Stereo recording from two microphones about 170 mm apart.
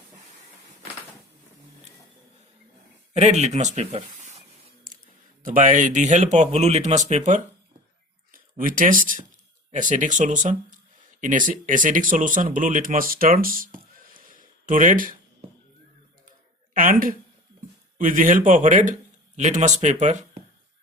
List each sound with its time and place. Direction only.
3.2 s a sound: 40° right (ahead or behind)
5.4 s speech: 50° right (ahead or behind)
8.3 s speech: 55° right (ahead or behind)
16.7 s a woman's voice: 55° right (ahead or behind)